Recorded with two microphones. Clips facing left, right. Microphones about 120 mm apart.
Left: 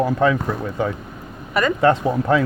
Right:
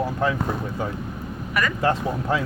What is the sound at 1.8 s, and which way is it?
Speech, 90° left.